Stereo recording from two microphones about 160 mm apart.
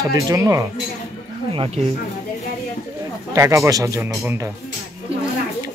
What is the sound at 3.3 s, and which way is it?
Speech, 20° right (ahead or behind).